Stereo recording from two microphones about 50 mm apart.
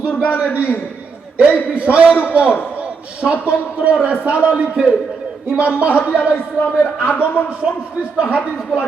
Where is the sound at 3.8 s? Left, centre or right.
Right.